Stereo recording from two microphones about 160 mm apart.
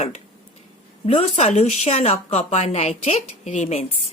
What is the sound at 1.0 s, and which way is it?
Speech, 40° left (ahead or behind).